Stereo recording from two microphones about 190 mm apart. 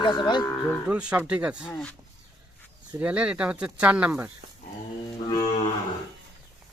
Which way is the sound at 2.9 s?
5° right (ahead or behind).